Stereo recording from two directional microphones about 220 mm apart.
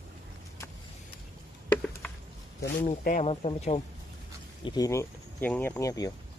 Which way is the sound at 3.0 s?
40° left (ahead or behind).